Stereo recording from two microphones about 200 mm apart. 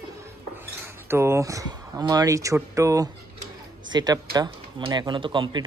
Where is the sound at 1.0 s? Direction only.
10° right (ahead or behind).